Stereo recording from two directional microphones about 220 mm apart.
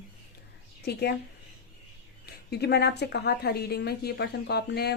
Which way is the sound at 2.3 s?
45° left (ahead or behind).